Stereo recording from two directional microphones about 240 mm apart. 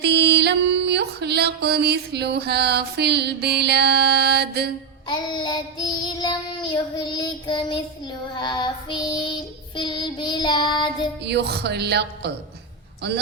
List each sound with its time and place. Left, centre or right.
0.0 s music: right
5.0 s child singing: centre
11.2 s speech: right